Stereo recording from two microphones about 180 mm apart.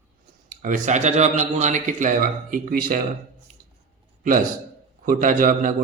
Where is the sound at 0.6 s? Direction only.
45° right (ahead or behind).